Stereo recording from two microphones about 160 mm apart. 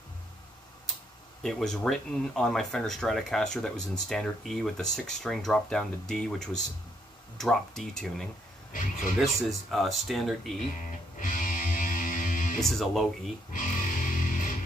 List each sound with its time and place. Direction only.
1.4 s speech: 5° left (ahead or behind)
10.8 s music: 55° left (ahead or behind)
12.5 s speech: centre (ahead or behind)
13.5 s music: 55° left (ahead or behind)